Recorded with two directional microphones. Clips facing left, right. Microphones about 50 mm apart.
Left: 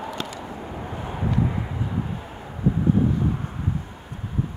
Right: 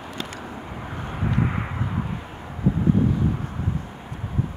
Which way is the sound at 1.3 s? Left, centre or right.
Right.